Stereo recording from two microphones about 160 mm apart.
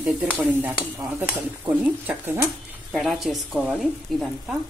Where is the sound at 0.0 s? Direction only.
10° right (ahead or behind).